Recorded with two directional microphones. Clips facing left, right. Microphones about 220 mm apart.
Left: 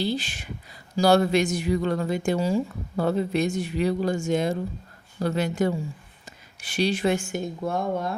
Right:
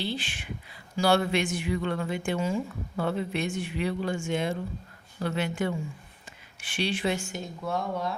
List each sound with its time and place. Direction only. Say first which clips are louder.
0.0 s speech: left 6 dB; 40° left (ahead or behind)